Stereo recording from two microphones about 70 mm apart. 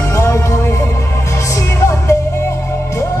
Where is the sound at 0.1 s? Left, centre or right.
Left.